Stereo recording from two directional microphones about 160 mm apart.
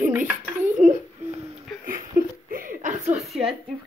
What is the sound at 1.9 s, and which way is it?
Laughter, 60° right (ahead or behind).